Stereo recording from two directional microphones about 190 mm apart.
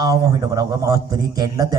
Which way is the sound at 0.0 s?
20° right (ahead or behind).